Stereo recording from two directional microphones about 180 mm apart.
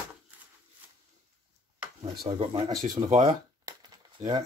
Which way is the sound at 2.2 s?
25° right (ahead or behind).